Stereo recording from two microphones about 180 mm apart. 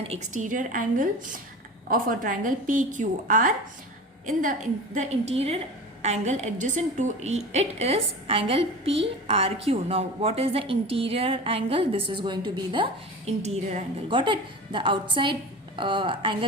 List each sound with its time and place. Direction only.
0.0 s a woman's voice: 40° right (ahead or behind)